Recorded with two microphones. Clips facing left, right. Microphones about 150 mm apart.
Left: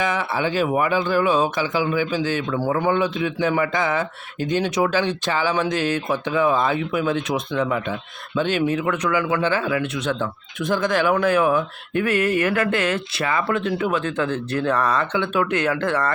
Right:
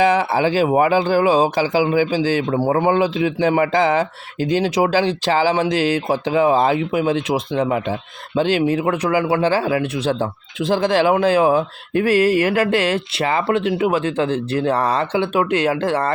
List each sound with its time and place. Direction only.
0.0 s speech: 35° right (ahead or behind)